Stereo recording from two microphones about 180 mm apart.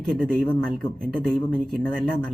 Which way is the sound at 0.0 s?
5° left (ahead or behind).